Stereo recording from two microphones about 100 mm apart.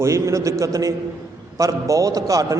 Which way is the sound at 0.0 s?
30° right (ahead or behind).